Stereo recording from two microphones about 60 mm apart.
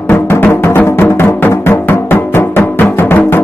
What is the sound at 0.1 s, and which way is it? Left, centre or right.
Music, left.